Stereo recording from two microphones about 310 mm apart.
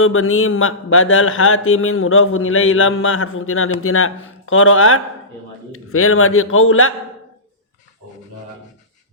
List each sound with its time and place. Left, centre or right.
0.0 s a man's voice: left